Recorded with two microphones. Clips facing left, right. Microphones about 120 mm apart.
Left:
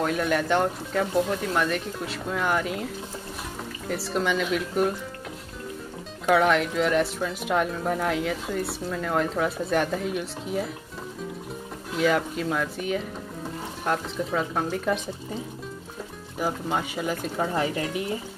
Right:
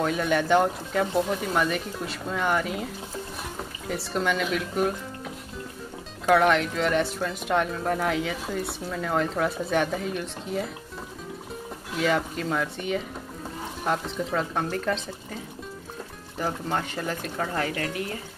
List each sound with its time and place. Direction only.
0.0 s speech: centre (ahead or behind)
3.9 s speech: centre (ahead or behind)
6.2 s speech: centre (ahead or behind)
12.0 s speech: centre (ahead or behind)
16.3 s speech: 10° left (ahead or behind)